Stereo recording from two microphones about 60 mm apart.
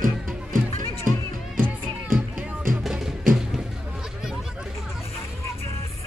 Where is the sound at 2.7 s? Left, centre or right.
Centre.